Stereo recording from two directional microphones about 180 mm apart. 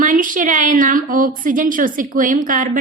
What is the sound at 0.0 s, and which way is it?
A woman's voice, 45° right (ahead or behind).